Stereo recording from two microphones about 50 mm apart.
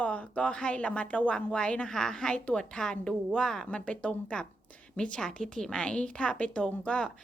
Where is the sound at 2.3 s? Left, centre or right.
Left.